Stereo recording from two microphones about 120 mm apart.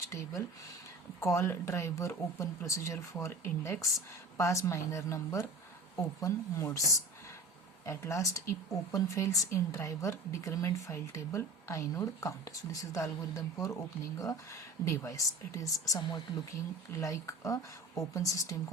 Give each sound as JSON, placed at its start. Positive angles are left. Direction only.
{"t": 0.1, "sound": "a woman's voice", "side_deg": 25}